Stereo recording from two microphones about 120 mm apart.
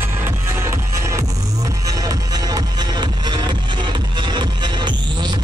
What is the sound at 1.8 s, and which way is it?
Music, 30° right (ahead or behind).